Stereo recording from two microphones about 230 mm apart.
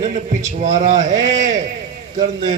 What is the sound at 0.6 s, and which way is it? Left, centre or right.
A man's voice, right.